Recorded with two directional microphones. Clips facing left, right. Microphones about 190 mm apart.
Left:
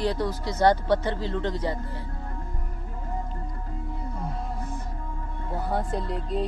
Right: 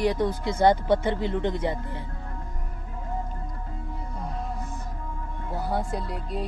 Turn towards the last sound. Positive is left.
turn(degrees=-5)  # may be behind; listen again after turning